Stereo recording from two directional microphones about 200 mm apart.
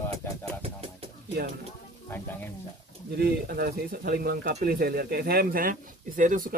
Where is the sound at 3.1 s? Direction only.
50° right (ahead or behind).